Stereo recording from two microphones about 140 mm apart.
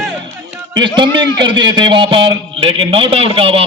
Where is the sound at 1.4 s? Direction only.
35° right (ahead or behind).